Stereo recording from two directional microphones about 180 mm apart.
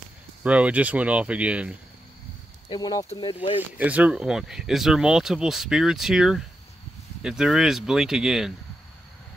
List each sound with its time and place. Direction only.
0.4 s speech: 5° right (ahead or behind)
2.7 s speech: 20° left (ahead or behind)
3.7 s speech: 10° right (ahead or behind)